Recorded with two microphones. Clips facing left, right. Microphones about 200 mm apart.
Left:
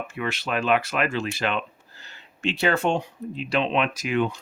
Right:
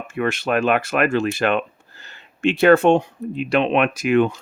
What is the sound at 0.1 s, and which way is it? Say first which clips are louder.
Speech: right 10 dB; 50° right (ahead or behind).